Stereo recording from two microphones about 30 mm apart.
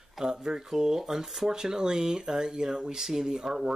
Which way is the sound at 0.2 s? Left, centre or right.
Right.